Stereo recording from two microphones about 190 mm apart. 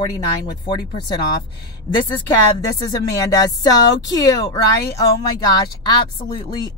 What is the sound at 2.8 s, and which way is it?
Speech, 20° left (ahead or behind).